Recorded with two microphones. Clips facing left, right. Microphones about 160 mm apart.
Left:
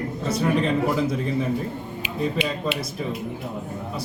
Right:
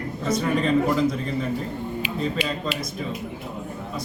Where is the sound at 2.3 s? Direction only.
25° left (ahead or behind).